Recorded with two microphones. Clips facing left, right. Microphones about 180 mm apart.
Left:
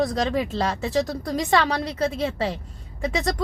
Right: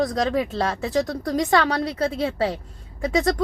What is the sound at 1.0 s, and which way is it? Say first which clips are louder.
Speech: right 2 dB; 25° left (ahead or behind).